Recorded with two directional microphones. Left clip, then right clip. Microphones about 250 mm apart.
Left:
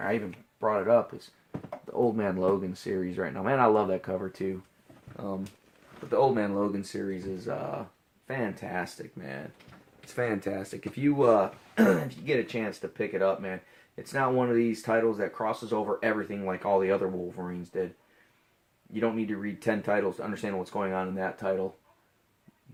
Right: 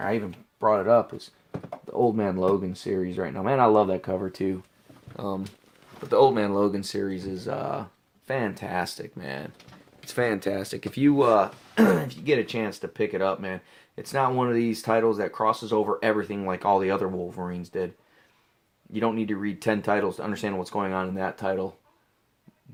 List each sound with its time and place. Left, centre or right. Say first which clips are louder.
0.6 s speech: right 4 dB; right
18.9 s speech: right 3 dB; right